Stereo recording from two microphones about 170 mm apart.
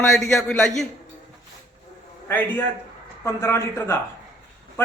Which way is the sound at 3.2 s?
15° left (ahead or behind).